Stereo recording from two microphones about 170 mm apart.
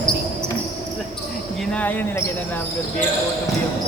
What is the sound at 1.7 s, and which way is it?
Speech, 10° left (ahead or behind).